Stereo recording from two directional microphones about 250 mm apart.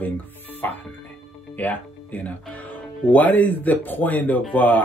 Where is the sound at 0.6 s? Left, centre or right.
Centre.